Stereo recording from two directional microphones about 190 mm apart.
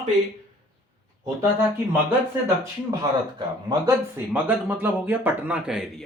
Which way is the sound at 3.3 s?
20° right (ahead or behind).